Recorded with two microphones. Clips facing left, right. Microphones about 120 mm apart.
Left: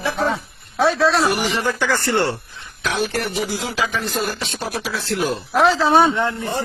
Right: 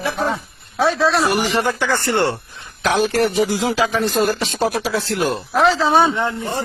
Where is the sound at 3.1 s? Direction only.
50° right (ahead or behind).